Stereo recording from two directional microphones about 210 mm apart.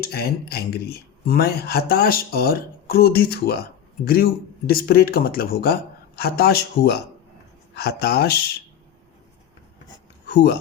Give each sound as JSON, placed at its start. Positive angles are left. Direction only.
{"t": 0.0, "sound": "speech", "side_deg": 45}
{"t": 10.2, "sound": "speech", "side_deg": 50}